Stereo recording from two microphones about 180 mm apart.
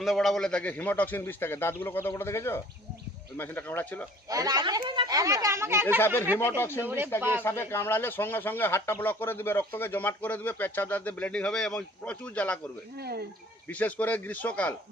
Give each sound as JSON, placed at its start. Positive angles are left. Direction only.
{"t": 0.0, "sound": "speech", "side_deg": 0}
{"t": 4.3, "sound": "speech", "side_deg": -20}
{"t": 6.6, "sound": "speech", "side_deg": 15}
{"t": 6.8, "sound": "speech", "side_deg": -10}
{"t": 7.4, "sound": "speech", "side_deg": 15}
{"t": 13.0, "sound": "speech", "side_deg": -60}
{"t": 13.7, "sound": "speech", "side_deg": 10}